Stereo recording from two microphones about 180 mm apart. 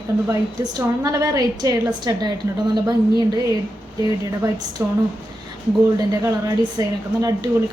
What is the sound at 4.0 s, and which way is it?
Speech, 20° right (ahead or behind).